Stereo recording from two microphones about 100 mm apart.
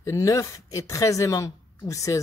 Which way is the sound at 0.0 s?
30° left (ahead or behind).